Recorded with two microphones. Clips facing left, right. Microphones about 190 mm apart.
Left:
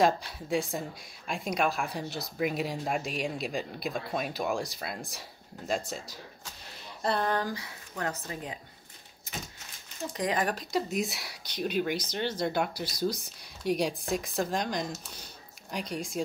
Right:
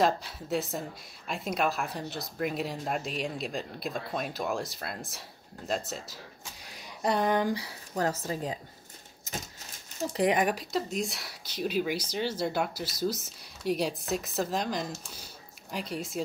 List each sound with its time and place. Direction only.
0.0 s a woman's voice: centre (ahead or behind)
7.0 s a sound: 15° right (ahead or behind)
7.5 s speech: 35° right (ahead or behind)
10.1 s speech: 25° right (ahead or behind)
10.4 s a sound: 10° right (ahead or behind)
10.7 s a woman's voice: centre (ahead or behind)